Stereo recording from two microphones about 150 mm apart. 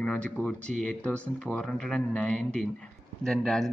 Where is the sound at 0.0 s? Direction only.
10° left (ahead or behind).